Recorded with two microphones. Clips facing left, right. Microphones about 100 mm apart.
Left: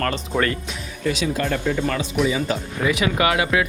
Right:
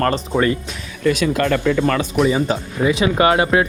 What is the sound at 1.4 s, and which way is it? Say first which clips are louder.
Speech: right 7 dB; 90° right.